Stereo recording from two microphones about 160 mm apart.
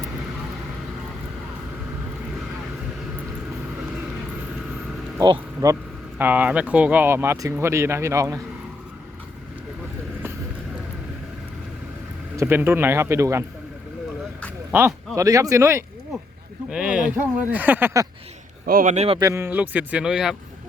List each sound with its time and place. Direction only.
5.2 s speech: 25° right (ahead or behind)
6.1 s speech: 10° right (ahead or behind)
12.4 s speech: 15° right (ahead or behind)
14.7 s speech: 15° right (ahead or behind)
16.6 s speech: 5° right (ahead or behind)
18.6 s speech: 60° right (ahead or behind); by 19.2 s 40° right (ahead or behind)
19.2 s speech: 15° right (ahead or behind)